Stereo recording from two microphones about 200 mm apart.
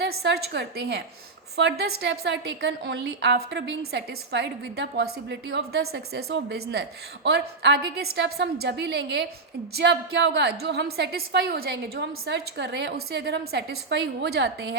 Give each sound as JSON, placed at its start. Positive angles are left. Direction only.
{"t": 0.2, "sound": "a woman's voice", "side_deg": -55}